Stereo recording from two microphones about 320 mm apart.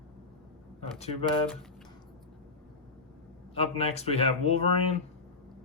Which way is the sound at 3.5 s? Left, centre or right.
Centre.